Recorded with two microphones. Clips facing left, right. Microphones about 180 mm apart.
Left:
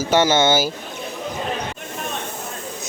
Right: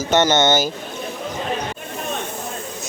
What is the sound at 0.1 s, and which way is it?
Speech, 10° left (ahead or behind).